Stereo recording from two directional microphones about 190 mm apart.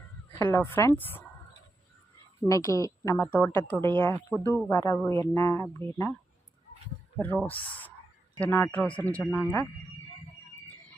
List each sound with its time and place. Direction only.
0.3 s a woman's voice: 10° left (ahead or behind)
2.5 s a woman's voice: 15° left (ahead or behind)
7.2 s a woman's voice: 10° left (ahead or behind)